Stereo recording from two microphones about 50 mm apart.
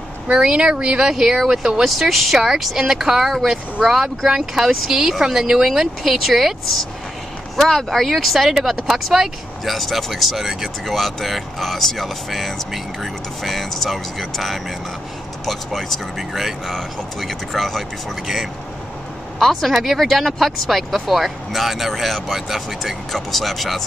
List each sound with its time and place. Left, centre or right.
0.3 s a woman's voice: centre